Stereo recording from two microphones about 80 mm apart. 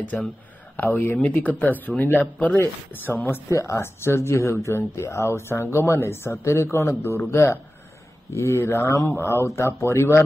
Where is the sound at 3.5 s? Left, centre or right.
Left.